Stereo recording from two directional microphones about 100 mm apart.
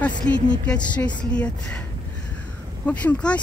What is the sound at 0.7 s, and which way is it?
Speech, 10° left (ahead or behind).